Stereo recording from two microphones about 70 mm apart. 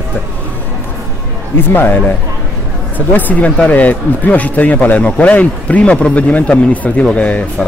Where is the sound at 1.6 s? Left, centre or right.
Left.